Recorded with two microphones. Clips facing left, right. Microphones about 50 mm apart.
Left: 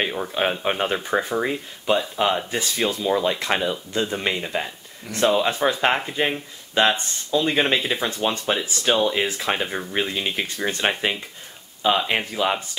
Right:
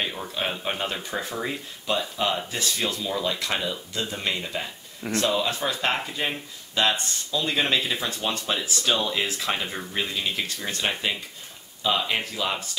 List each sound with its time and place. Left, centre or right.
0.0 s speech: left
1.2 s speech: centre